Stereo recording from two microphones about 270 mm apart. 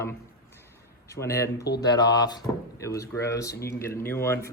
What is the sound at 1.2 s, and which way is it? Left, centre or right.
Speech, centre.